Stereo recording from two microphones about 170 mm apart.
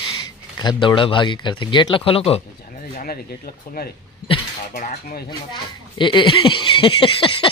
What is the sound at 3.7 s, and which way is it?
Cutlery, 60° left (ahead or behind).